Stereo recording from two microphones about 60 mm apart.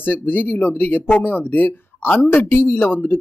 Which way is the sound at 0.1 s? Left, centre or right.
Left.